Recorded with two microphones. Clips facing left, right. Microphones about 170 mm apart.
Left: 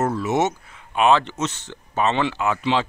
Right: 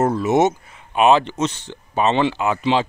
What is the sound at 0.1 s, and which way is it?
Speech, 15° right (ahead or behind).